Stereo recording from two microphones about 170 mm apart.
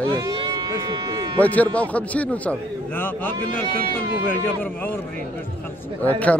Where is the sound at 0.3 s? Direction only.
25° right (ahead or behind).